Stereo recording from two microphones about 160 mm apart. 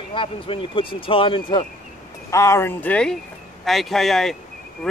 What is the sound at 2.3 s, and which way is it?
Speech, 20° left (ahead or behind).